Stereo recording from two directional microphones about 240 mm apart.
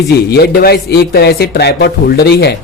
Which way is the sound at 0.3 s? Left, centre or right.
Left.